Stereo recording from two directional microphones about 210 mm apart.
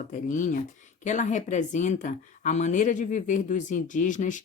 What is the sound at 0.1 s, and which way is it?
A woman's voice, 35° left (ahead or behind).